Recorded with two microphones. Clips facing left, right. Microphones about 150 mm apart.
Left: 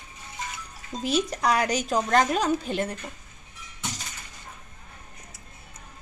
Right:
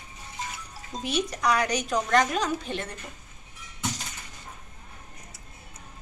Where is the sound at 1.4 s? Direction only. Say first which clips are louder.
Left 1 dB; 25° left (ahead or behind).